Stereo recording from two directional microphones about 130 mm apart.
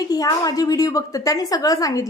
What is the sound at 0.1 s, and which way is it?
A woman's voice, 30° left (ahead or behind).